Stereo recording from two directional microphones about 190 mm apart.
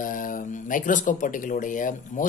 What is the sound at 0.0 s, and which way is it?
Speech, 45° left (ahead or behind).